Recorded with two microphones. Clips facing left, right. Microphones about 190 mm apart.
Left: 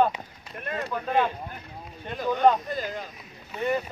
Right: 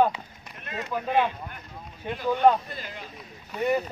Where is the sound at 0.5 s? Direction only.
50° left (ahead or behind).